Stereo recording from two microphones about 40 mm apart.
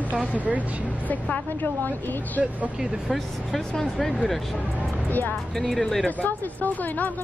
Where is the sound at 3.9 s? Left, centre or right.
Centre.